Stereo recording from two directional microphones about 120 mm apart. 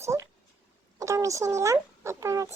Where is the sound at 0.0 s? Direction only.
25° right (ahead or behind).